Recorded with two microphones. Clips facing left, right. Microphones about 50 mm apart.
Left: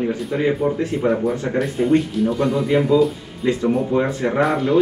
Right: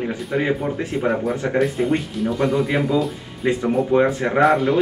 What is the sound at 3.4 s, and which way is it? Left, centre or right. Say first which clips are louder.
Speech: even; right.